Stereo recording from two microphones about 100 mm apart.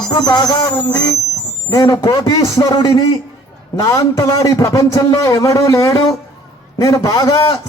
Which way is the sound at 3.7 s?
35° left (ahead or behind).